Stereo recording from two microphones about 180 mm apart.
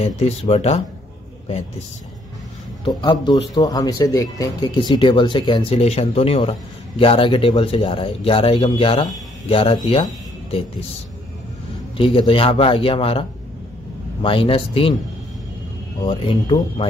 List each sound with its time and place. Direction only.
0.0 s speech: 35° left (ahead or behind)
2.8 s speech: 25° left (ahead or behind)
12.0 s speech: 30° left (ahead or behind)
16.0 s speech: 25° left (ahead or behind)